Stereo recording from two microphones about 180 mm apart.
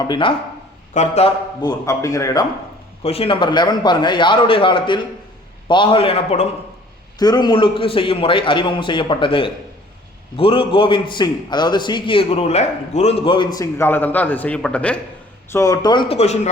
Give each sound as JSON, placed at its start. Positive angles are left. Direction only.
{"t": 0.0, "sound": "a man's voice", "side_deg": 25}
{"t": 0.9, "sound": "a man's voice", "side_deg": 35}
{"t": 1.6, "sound": "a man's voice", "side_deg": 15}
{"t": 3.0, "sound": "a man's voice", "side_deg": 35}
{"t": 7.2, "sound": "a man's voice", "side_deg": 20}